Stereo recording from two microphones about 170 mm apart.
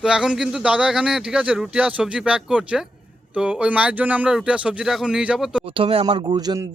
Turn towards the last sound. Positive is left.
turn(degrees=-25)  # may be behind; listen again after turning